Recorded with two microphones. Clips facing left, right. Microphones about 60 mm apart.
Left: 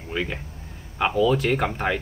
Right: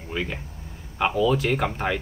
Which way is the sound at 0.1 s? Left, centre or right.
Centre.